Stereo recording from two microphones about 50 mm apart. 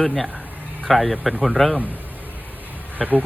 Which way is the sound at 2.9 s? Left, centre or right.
Right.